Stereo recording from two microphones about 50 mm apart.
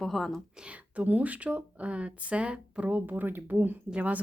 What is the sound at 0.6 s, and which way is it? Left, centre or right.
Speech, right.